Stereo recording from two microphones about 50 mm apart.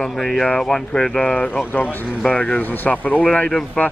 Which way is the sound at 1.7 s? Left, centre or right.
Left.